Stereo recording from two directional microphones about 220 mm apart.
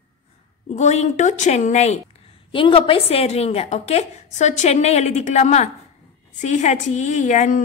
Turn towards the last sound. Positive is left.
turn(degrees=35)  # may be behind; listen again after turning